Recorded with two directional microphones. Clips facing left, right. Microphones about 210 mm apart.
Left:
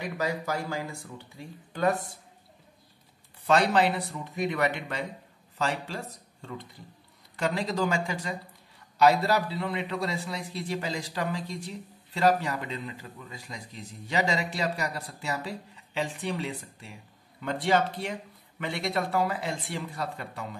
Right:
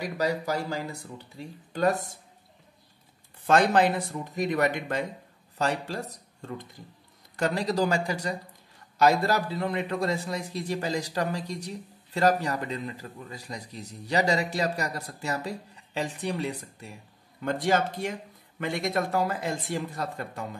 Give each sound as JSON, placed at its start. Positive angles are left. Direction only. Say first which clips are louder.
{"t": 0.2, "sound": "a man's voice", "louder": "right 3 dB", "side_deg": -35}
{"t": 3.4, "sound": "a man's voice", "louder": "right 2 dB", "side_deg": -45}